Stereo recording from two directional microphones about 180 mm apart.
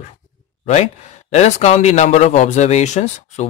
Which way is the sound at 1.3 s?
35° left (ahead or behind).